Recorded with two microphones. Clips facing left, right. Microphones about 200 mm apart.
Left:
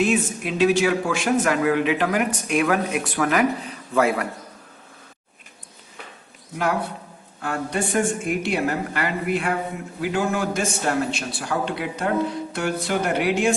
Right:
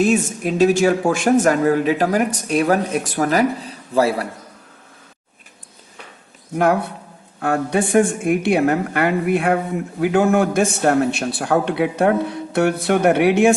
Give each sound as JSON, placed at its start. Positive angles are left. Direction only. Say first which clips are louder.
{"t": 0.0, "sound": "speech", "louder": "right 4 dB", "side_deg": -45}
{"t": 6.6, "sound": "a man's voice", "louder": "right 7 dB", "side_deg": -55}